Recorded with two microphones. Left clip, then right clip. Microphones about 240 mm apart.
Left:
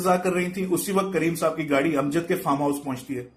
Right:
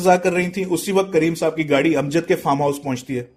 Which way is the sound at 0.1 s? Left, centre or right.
Right.